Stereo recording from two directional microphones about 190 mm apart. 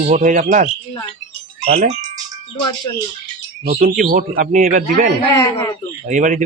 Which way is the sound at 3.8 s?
45° right (ahead or behind).